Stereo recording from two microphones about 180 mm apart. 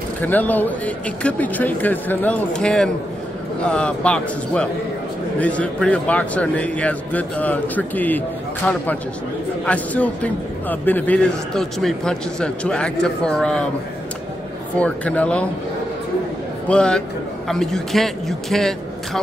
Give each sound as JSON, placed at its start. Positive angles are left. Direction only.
{"t": 0.2, "sound": "a man's voice", "side_deg": 10}
{"t": 14.8, "sound": "speech", "side_deg": 5}
{"t": 16.6, "sound": "a man's voice", "side_deg": 5}